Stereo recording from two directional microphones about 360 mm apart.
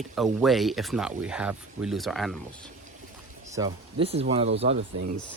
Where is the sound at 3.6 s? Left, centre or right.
Centre.